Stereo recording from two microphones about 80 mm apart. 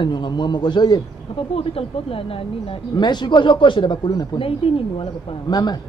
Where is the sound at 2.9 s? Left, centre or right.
Left.